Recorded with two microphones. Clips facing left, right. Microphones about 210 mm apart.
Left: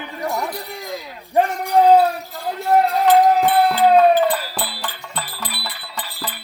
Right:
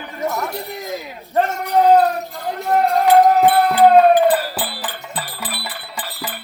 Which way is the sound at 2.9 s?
50° right (ahead or behind).